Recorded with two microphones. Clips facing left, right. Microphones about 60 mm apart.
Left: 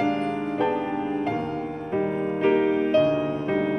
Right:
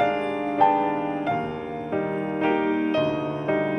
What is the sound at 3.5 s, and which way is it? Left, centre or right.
Music, centre.